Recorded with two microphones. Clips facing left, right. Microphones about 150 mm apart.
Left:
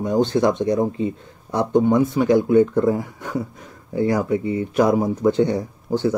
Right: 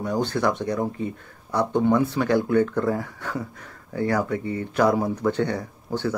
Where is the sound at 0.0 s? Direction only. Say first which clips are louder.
Left 5 dB; 20° left (ahead or behind).